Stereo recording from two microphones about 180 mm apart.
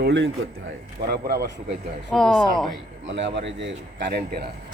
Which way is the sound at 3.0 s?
90° right.